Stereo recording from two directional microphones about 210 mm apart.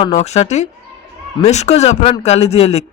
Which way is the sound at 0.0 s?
30° left (ahead or behind).